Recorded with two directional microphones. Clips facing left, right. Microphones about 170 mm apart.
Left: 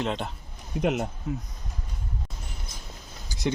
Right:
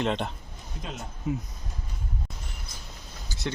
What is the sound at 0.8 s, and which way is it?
Speech, 70° left (ahead or behind).